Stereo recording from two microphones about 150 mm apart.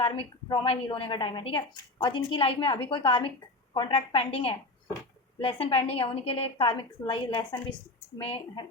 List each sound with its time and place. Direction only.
0.0 s a woman's voice: 35° left (ahead or behind)